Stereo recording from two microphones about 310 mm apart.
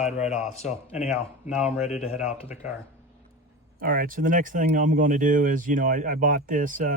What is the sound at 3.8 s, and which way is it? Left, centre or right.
Speech, right.